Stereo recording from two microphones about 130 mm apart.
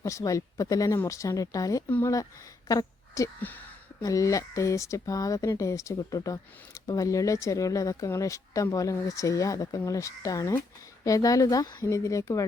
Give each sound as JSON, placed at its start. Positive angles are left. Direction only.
{"t": 0.0, "sound": "speech", "side_deg": 25}
{"t": 1.9, "sound": "speech", "side_deg": 15}
{"t": 2.6, "sound": "a sound", "side_deg": 25}
{"t": 4.0, "sound": "speech", "side_deg": 25}